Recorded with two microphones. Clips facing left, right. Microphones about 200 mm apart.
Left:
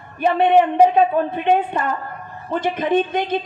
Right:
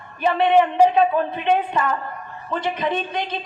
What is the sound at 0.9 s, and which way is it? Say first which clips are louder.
A woman's voice: left 2 dB; 50° left (ahead or behind).